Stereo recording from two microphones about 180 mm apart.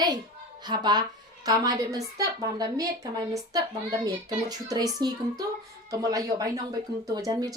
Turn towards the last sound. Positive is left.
turn(degrees=-20)  # may be behind; listen again after turning